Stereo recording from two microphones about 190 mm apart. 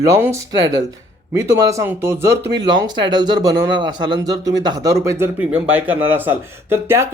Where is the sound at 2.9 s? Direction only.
25° right (ahead or behind).